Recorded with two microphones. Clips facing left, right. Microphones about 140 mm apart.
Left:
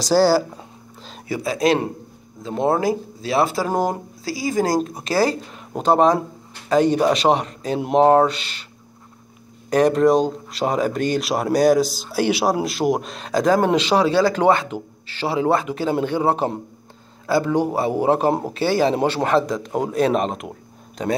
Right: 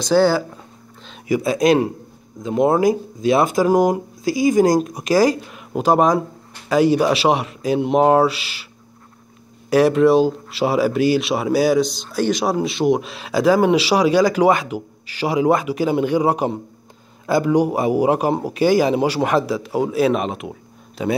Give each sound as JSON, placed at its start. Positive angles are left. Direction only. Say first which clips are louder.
{"t": 0.1, "sound": "speech", "louder": "even", "side_deg": 5}
{"t": 1.3, "sound": "speech", "louder": "right 4 dB", "side_deg": -20}
{"t": 9.7, "sound": "speech", "louder": "right 2 dB", "side_deg": -5}